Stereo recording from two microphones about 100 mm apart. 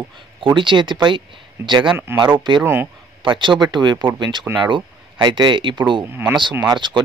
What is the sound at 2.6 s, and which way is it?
Speech, 20° right (ahead or behind).